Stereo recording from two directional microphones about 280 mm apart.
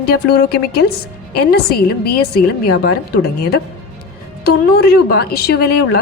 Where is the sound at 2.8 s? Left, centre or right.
Left.